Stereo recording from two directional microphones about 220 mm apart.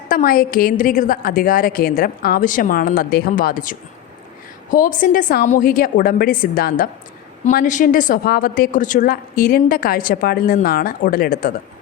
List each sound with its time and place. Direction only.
0.1 s a woman's voice: 40° left (ahead or behind)